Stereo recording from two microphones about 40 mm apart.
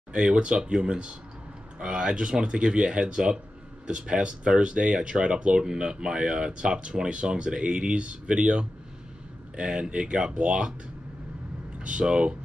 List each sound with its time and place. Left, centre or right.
0.3 s speech: right
11.8 s speech: right